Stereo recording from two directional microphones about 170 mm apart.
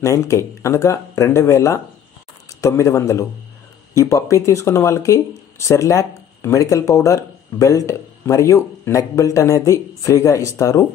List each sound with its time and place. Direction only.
0.0 s speech: 15° left (ahead or behind)